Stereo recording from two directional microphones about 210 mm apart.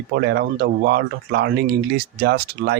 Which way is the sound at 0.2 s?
50° right (ahead or behind).